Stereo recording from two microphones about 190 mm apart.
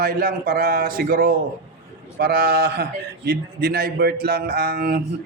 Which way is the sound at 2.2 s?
55° right (ahead or behind).